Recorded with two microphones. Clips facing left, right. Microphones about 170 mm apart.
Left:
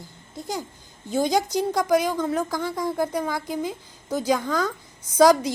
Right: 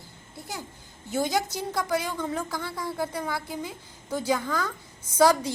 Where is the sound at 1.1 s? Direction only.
15° left (ahead or behind).